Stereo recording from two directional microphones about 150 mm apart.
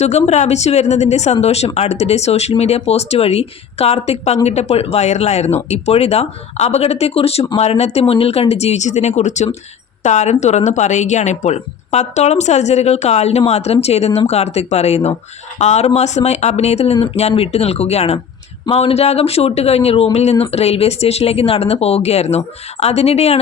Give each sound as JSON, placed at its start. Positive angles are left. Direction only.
{"t": 0.0, "sound": "speech", "side_deg": 45}